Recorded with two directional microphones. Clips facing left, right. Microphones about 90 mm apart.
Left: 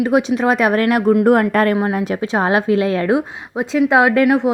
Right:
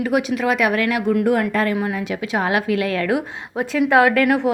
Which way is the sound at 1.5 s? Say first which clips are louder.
Left 5 dB; 55° left (ahead or behind).